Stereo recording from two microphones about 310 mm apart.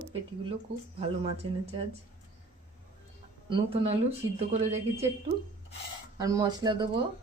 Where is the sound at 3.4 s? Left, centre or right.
Centre.